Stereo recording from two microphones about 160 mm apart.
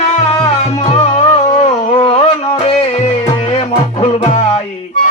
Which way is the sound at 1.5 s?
40° left (ahead or behind).